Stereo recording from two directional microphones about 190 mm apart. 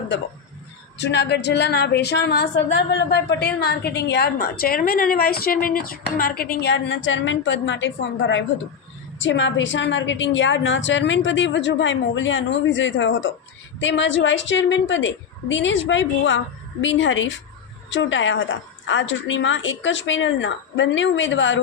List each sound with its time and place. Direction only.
0.9 s a woman's voice: 65° left (ahead or behind)